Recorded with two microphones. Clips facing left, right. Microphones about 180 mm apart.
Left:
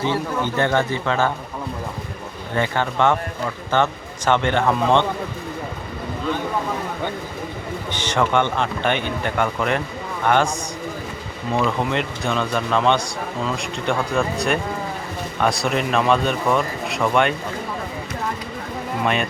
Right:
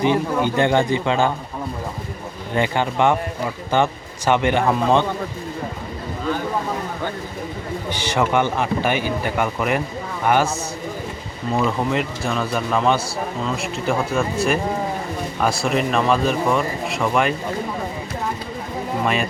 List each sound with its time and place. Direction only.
0.0 s speech: 15° right (ahead or behind)
2.6 s speech: 15° right (ahead or behind)
7.9 s speech: 10° right (ahead or behind)
11.5 s speech: 5° right (ahead or behind)
19.0 s speech: centre (ahead or behind)